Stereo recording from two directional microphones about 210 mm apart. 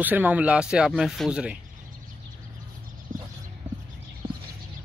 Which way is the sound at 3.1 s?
40° right (ahead or behind).